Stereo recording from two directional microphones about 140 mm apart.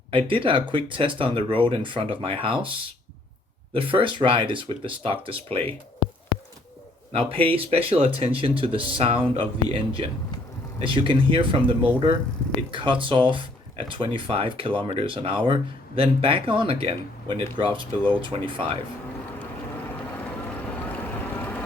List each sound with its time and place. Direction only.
0.3 s speech: 40° right (ahead or behind)
3.8 s speech: 40° right (ahead or behind)
7.2 s speech: 40° right (ahead or behind)
20.1 s vehicle: 10° left (ahead or behind)